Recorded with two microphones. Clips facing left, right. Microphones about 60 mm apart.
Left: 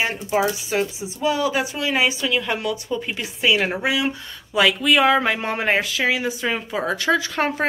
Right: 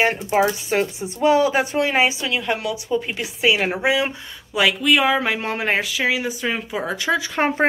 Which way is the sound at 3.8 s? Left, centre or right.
Right.